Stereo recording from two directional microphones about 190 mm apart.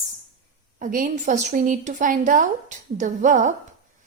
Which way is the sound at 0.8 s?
45° right (ahead or behind).